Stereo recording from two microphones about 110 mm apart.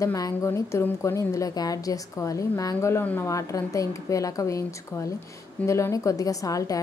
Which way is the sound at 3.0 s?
15° left (ahead or behind).